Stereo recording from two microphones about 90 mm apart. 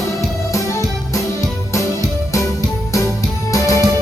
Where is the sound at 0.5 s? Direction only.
35° left (ahead or behind).